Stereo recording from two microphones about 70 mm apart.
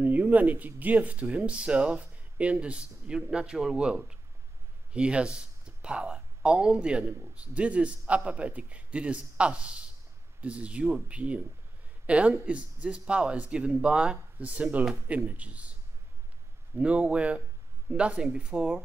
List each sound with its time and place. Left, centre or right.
0.0 s speech: right
16.7 s speech: centre